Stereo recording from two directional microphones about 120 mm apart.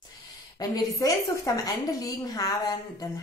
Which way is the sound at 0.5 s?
30° left (ahead or behind).